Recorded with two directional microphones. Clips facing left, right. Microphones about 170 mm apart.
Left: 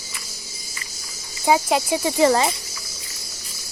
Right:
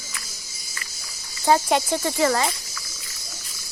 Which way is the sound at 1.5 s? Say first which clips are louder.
Left 1 dB; 5° left (ahead or behind).